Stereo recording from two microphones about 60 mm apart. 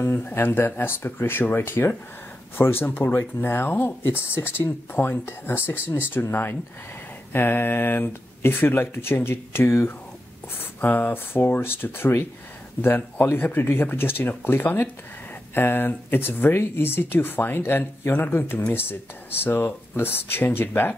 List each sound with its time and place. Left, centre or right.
0.3 s speech: left
7.3 s speech: left